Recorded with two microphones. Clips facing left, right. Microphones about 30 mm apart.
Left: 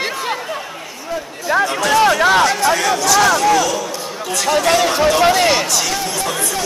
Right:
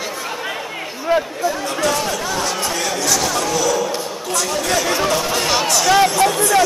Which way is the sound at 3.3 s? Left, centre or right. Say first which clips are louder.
Left 6 dB; left.